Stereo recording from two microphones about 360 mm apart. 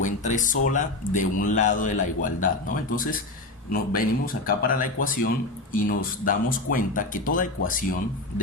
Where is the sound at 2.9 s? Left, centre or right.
Left.